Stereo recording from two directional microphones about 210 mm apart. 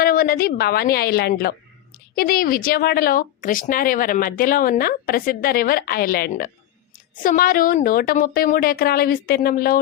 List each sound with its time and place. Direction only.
0.0 s speech: 45° left (ahead or behind)